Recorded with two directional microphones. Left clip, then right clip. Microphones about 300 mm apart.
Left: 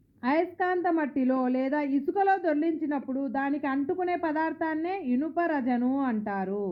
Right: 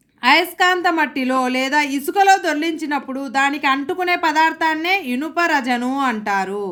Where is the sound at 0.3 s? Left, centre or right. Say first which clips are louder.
Right 12 dB; centre.